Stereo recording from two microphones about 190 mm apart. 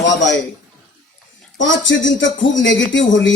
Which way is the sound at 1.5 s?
75° left (ahead or behind).